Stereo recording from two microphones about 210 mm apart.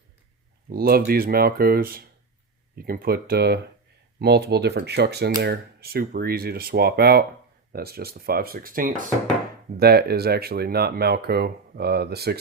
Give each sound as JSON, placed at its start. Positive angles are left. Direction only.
{"t": 0.7, "sound": "speech", "side_deg": -45}